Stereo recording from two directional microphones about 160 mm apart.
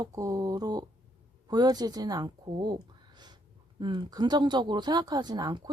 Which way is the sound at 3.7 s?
30° right (ahead or behind).